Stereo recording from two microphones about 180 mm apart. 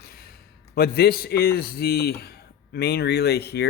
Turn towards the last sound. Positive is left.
turn(degrees=65)  # may be behind; listen again after turning